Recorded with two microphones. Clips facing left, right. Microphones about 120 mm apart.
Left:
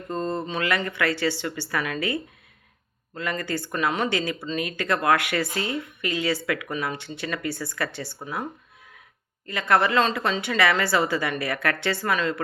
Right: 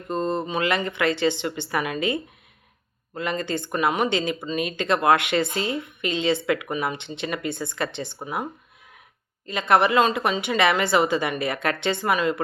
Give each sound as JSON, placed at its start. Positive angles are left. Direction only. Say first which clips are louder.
{"t": 0.1, "sound": "speech", "louder": "right 3 dB", "side_deg": -20}
{"t": 9.5, "sound": "speech", "louder": "right 2 dB", "side_deg": -20}